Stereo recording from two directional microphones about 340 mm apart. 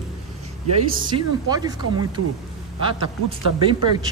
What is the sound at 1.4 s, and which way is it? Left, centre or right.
Speech, centre.